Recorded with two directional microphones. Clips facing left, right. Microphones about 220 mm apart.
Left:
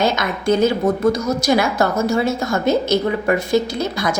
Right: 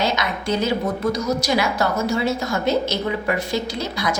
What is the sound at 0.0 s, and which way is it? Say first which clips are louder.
A woman's voice: left 4 dB; 50° left (ahead or behind).